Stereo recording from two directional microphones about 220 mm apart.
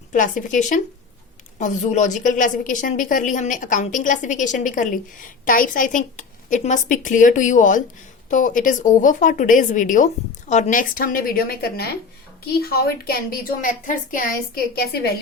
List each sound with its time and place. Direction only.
0.1 s a woman's voice: 35° left (ahead or behind)